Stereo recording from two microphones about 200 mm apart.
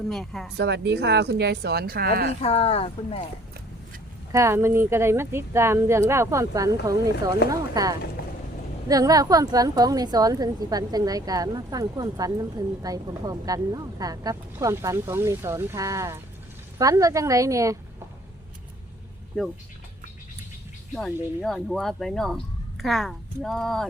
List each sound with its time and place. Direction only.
0.1 s speech: centre (ahead or behind)
0.5 s speech: 60° right (ahead or behind)
2.4 s speech: 30° left (ahead or behind)
4.3 s a woman's voice: 15° right (ahead or behind)
8.2 s vehicle: 50° left (ahead or behind)
8.9 s a woman's voice: 20° right (ahead or behind)
19.3 s speech: 5° left (ahead or behind)
20.9 s speech: centre (ahead or behind)